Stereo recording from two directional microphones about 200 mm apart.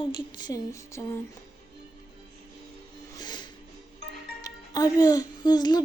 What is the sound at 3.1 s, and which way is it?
Music, 20° left (ahead or behind).